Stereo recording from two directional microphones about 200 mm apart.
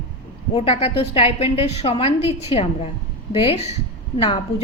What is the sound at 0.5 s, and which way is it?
A woman's voice, 30° left (ahead or behind).